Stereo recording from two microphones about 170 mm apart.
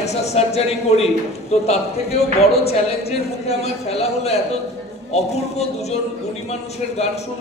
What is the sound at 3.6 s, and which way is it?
Speech, 40° left (ahead or behind).